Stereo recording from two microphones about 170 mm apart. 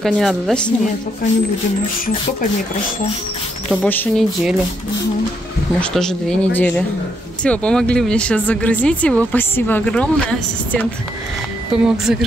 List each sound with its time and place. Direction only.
0.0 s speech: centre (ahead or behind)
3.8 s speech: 10° left (ahead or behind)
5.8 s speech: 5° left (ahead or behind)
11.7 s speech: 5° right (ahead or behind)